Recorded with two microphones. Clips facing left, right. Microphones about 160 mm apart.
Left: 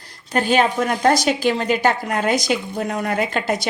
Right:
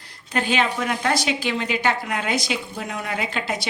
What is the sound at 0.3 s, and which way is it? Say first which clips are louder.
A woman's voice: left 5 dB; 45° left (ahead or behind).